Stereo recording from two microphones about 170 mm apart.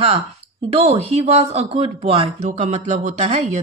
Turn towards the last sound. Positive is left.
turn(degrees=-40)  # may be behind; listen again after turning